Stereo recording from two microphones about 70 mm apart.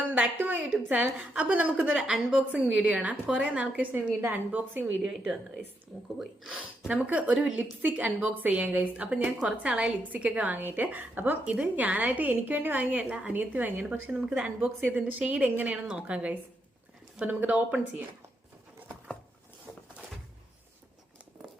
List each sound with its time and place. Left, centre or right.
0.0 s a woman's voice: right
5.0 s a woman's voice: centre
19.7 s a sound: left